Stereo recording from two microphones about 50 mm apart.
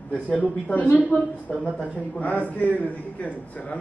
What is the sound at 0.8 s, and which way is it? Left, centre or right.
A woman's voice, left.